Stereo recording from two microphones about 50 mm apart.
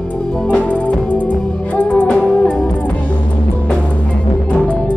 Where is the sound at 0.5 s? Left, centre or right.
Left.